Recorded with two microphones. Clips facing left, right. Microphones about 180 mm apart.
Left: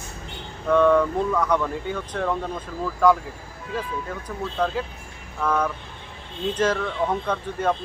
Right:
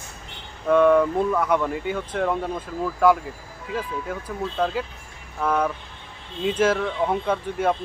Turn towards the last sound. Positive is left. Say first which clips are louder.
# right 1 dB
turn(degrees=-10)  # may be behind; listen again after turning